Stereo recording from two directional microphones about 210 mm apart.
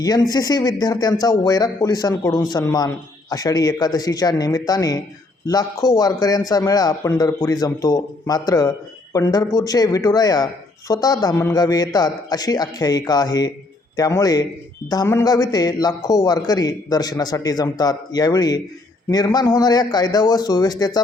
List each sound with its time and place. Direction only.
0.0 s a man's voice: 20° left (ahead or behind)